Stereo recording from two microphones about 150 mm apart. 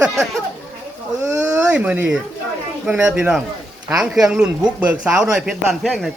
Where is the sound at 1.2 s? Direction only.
20° right (ahead or behind).